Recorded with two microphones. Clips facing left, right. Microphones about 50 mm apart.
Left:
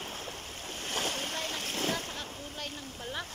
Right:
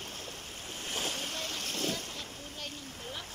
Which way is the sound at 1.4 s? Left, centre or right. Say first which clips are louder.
Left 2 dB; centre.